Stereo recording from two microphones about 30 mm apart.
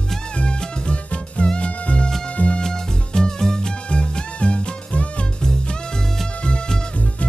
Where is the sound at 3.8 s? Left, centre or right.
Left.